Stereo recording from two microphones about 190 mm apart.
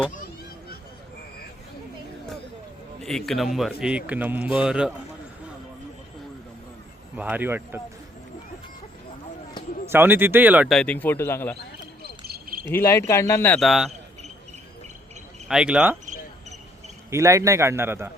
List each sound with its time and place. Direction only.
3.0 s speech: centre (ahead or behind)
7.2 s a man's voice: 10° right (ahead or behind)
9.9 s speech: 10° right (ahead or behind); by 11.5 s 10° left (ahead or behind)
12.0 s a sound: 55° right (ahead or behind)
12.6 s speech: 15° left (ahead or behind)
13.6 s speech: centre (ahead or behind)
15.4 s speech: 5° right (ahead or behind)
17.1 s a man's voice: 15° right (ahead or behind)